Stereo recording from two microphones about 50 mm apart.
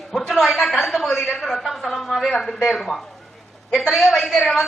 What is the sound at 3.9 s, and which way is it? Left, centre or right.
Speech, centre.